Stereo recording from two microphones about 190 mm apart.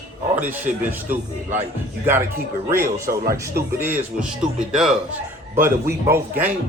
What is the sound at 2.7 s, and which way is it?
Music, 15° right (ahead or behind).